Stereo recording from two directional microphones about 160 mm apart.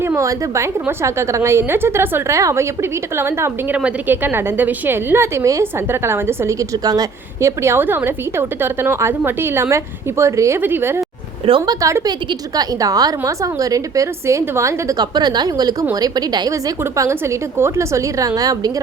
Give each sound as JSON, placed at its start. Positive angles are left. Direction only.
{"t": 0.0, "sound": "a woman's voice", "side_deg": -15}
{"t": 11.4, "sound": "a woman's voice", "side_deg": -30}